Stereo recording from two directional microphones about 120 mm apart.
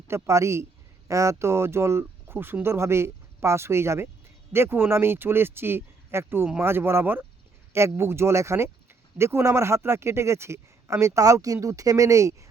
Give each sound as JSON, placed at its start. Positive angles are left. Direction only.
{"t": 0.1, "sound": "speech", "side_deg": -25}